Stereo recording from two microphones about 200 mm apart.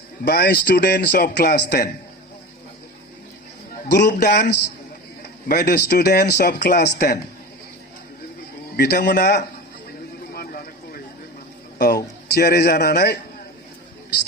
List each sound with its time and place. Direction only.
0.3 s speech: 55° left (ahead or behind)
3.8 s speech: 55° left (ahead or behind)
5.5 s speech: 55° left (ahead or behind)
8.7 s a man's voice: 50° left (ahead or behind)
10.3 s a sound: 45° left (ahead or behind)
11.8 s a man's voice: 55° left (ahead or behind)